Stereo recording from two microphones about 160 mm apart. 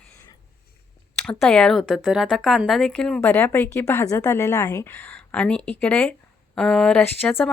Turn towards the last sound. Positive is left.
turn(degrees=10)  # may be behind; listen again after turning